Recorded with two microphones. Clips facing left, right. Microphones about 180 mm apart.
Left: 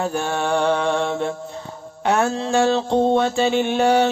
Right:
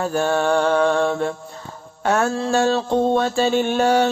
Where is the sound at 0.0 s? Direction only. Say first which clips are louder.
Right 3 dB; 15° left (ahead or behind).